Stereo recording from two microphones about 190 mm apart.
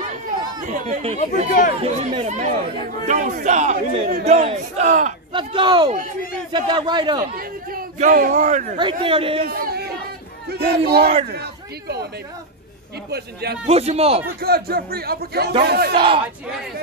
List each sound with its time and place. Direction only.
0.7 s speech: 40° right (ahead or behind)
5.3 s a man's voice: 25° right (ahead or behind)
7.3 s a man's voice: 50° right (ahead or behind); by 9.4 s 30° right (ahead or behind)
9.5 s chatter: 55° right (ahead or behind)
10.5 s speech: 55° right (ahead or behind)
13.1 s speech: 60° right (ahead or behind)
13.7 s speech: 35° right (ahead or behind)
14.4 s speech: 55° right (ahead or behind)
15.9 s a man's voice: 25° right (ahead or behind)